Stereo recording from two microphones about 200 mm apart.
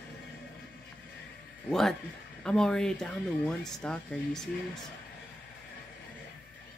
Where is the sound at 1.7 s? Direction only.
Centre (ahead or behind).